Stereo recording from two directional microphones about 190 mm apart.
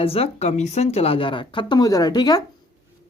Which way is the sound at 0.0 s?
30° left (ahead or behind).